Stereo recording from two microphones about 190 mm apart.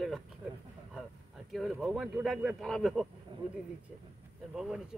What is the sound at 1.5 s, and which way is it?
Chopping, centre (ahead or behind).